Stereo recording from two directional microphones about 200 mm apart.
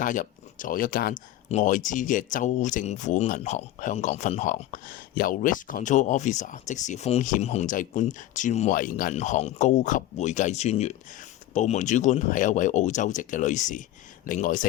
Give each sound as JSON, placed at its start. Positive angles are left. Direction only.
{"t": 0.0, "sound": "speech", "side_deg": 40}